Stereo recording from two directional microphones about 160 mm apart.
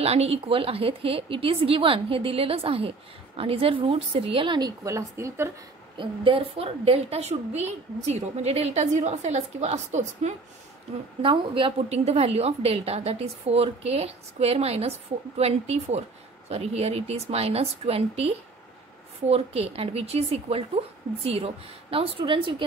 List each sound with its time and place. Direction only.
0.0 s a woman's voice: 40° right (ahead or behind); by 5.5 s 15° right (ahead or behind)
5.9 s a woman's voice: 35° right (ahead or behind)
11.2 s a woman's voice: 35° right (ahead or behind)
21.9 s a woman's voice: 35° right (ahead or behind)